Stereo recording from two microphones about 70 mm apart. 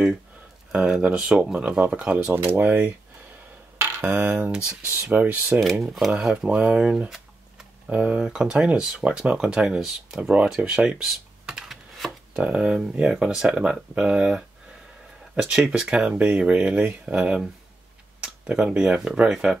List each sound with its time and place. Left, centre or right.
0.7 s speech: centre
2.1 s speech: right
3.7 s a sound: right
4.6 s speech: centre
5.6 s speech: centre
7.9 s speech: centre
10.3 s computer keyboard: centre
12.4 s speech: centre
18.2 s tick-tock: centre
18.8 s speech: centre